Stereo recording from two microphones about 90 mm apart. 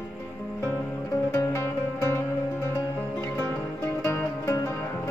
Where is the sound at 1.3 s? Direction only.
30° left (ahead or behind).